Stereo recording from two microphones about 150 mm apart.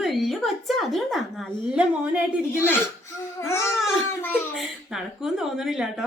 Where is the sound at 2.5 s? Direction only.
15° left (ahead or behind).